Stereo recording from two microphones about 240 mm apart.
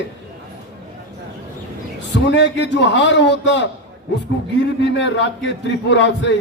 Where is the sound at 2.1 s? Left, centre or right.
Left.